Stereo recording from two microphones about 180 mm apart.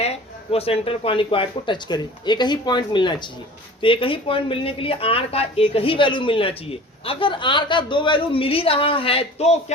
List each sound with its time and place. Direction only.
0.0 s speech: 35° left (ahead or behind)